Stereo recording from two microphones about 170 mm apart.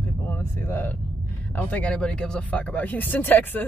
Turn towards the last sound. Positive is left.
turn(degrees=10)  # may be behind; listen again after turning